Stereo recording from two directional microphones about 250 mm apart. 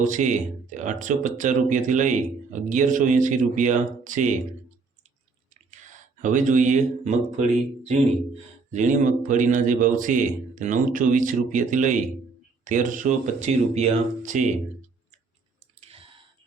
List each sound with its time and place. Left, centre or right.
0.0 s speech: right
6.2 s speech: right
8.7 s speech: right
15.8 s clicking: right